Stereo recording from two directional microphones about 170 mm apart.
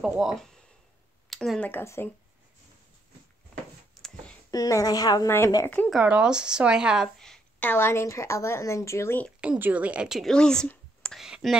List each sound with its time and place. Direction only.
0.0 s speech: 5° right (ahead or behind)
1.7 s speech: 15° left (ahead or behind)
4.5 s speech: 20° left (ahead or behind)
5.8 s speech: centre (ahead or behind); by 9.3 s 15° left (ahead or behind)
9.4 s speech: 10° right (ahead or behind)